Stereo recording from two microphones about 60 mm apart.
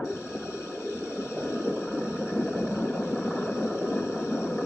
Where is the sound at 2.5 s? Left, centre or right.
Left.